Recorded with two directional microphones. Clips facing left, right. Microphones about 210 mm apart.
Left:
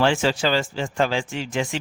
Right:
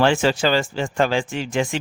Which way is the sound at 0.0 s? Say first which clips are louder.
Right 2 dB; 55° right (ahead or behind).